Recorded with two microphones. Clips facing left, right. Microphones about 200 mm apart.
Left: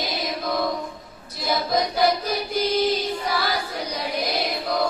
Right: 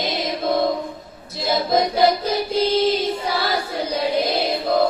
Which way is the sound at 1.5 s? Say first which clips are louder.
Right 4 dB; 25° right (ahead or behind).